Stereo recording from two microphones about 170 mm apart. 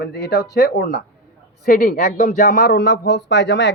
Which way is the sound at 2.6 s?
80° left.